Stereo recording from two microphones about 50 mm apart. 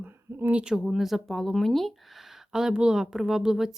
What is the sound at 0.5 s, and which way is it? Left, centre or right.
Speech, centre.